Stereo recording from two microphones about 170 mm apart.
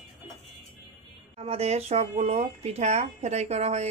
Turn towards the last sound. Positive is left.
turn(degrees=-40)  # may be behind; listen again after turning